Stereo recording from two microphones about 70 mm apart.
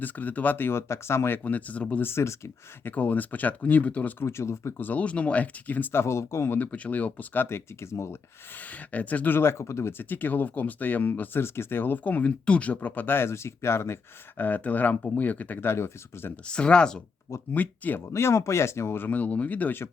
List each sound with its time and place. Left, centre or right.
0.0 s speech: left
1.5 s speech: left
2.0 s speech: left
2.8 s speech: left
4.2 s speech: left
4.8 s speech: left
5.9 s speech: left
6.6 s speech: centre
7.4 s speech: left
8.5 s speech: left
9.4 s speech: left
16.5 s speech: centre
17.5 s speech: left
18.1 s speech: left